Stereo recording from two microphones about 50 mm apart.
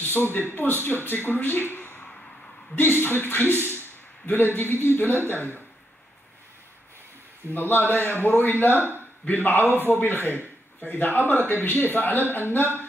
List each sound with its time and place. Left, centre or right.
0.0 s a sound: left
0.5 s a man's voice: left
7.5 s a man's voice: left